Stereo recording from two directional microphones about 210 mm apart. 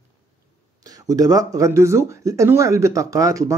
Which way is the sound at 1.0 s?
15° right (ahead or behind).